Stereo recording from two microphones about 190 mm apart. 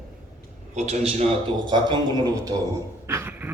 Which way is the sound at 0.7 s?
35° right (ahead or behind).